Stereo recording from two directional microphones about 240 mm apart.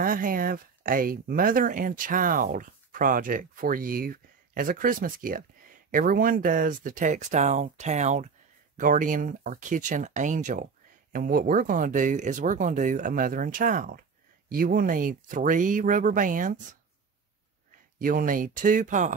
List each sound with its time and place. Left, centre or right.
0.0 s speech: right
17.9 s speech: right